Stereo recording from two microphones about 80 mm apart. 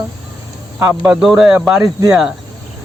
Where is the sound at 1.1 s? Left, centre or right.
Centre.